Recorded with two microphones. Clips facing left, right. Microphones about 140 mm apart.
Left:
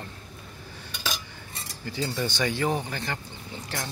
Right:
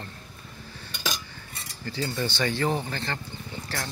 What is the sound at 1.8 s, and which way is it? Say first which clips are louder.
Cutlery: even; 15° left (ahead or behind).